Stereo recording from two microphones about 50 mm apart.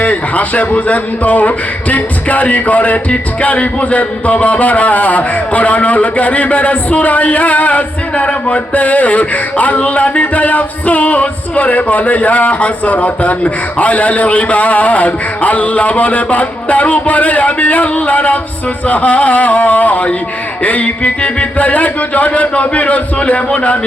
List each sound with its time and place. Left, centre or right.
0.0 s a man's voice: left